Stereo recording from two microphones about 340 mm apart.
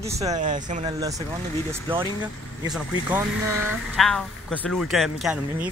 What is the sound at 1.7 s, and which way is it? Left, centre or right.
Speech, centre.